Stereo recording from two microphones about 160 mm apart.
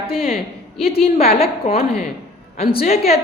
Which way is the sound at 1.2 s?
70° left (ahead or behind).